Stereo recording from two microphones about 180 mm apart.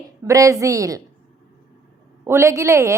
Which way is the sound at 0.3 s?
20° right (ahead or behind).